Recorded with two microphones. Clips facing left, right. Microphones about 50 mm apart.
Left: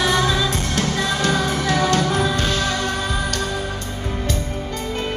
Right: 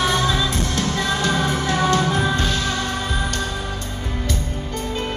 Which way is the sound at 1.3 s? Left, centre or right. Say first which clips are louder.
Left 1 dB; right.